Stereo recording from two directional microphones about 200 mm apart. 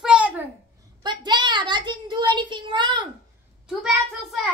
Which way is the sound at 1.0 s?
20° right (ahead or behind).